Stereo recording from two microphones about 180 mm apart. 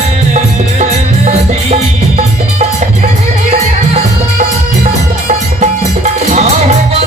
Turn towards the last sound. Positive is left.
turn(degrees=-40)  # may be behind; listen again after turning